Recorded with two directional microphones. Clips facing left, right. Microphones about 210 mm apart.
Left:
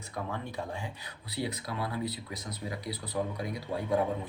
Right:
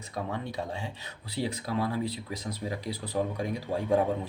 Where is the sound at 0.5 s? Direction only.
20° right (ahead or behind).